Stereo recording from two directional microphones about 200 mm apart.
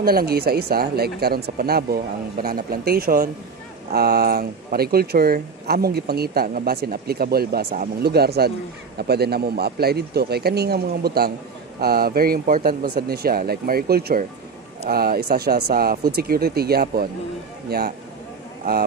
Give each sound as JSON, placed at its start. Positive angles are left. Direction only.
{"t": 0.0, "sound": "speech", "side_deg": -50}